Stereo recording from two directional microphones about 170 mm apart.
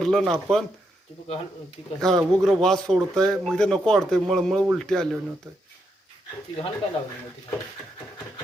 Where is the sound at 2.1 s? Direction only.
5° left (ahead or behind).